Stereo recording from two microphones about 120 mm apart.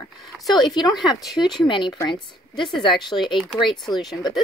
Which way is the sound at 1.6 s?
40° left (ahead or behind).